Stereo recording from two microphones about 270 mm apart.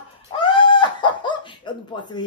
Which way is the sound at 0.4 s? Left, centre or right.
Centre.